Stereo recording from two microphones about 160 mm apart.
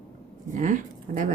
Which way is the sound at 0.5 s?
55° right (ahead or behind).